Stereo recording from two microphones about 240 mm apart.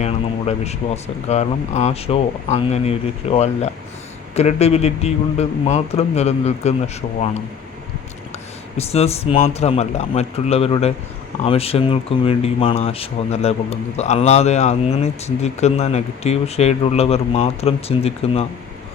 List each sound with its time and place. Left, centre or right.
0.0 s speech: left
8.8 s speech: left